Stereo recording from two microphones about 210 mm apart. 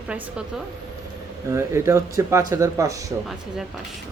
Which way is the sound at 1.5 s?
15° right (ahead or behind).